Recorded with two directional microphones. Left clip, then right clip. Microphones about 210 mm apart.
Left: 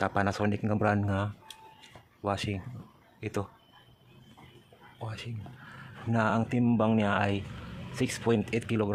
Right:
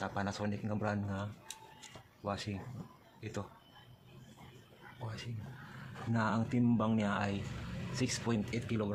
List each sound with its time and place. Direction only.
0.0 s speech: 55° left (ahead or behind)
4.9 s speech: 50° left (ahead or behind)